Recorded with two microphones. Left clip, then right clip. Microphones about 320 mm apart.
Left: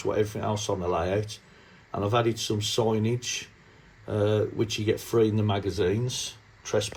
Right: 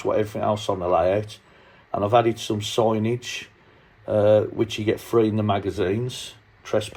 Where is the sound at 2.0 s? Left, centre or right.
Centre.